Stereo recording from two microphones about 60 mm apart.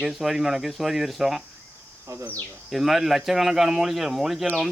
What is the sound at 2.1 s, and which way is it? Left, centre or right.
Speech, right.